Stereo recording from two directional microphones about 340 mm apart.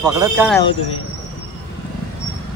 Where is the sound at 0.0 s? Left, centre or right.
Centre.